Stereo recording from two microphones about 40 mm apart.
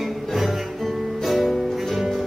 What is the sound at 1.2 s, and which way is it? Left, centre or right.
Music, centre.